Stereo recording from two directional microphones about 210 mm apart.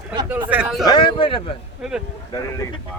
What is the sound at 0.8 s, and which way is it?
Speech, 20° left (ahead or behind).